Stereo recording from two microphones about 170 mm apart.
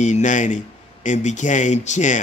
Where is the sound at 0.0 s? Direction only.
45° left (ahead or behind).